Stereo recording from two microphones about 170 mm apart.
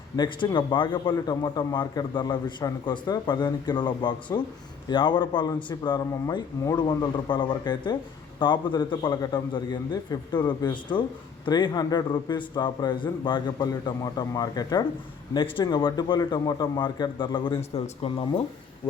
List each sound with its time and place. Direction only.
0.2 s a man's voice: 25° left (ahead or behind)